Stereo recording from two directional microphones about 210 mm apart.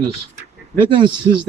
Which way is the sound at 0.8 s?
25° right (ahead or behind).